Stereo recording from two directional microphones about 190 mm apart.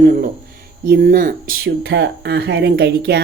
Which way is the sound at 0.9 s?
45° right (ahead or behind).